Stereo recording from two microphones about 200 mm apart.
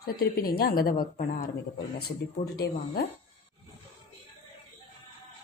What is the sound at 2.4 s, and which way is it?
Speech, 50° left (ahead or behind).